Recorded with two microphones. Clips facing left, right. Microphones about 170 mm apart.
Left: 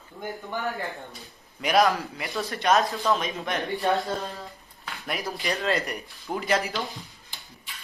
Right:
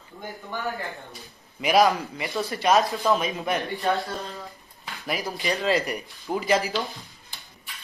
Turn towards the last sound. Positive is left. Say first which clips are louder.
# right 2 dB
turn(degrees=0)  # may be behind; listen again after turning